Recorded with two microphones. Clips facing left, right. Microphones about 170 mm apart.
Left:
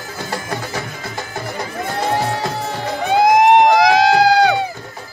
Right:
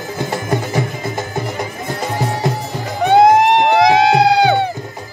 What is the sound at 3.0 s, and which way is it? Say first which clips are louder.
Music: right 5 dB; 65° right (ahead or behind).